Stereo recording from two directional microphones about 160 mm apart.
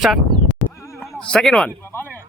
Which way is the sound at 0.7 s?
15° left (ahead or behind).